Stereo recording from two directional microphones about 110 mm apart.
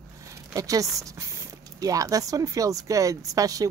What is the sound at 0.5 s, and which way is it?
Speech, 30° right (ahead or behind).